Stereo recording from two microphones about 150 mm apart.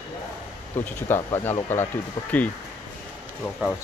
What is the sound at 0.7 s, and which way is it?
Speech, 15° left (ahead or behind).